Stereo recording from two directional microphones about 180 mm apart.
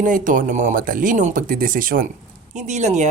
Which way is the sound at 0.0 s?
45° right (ahead or behind).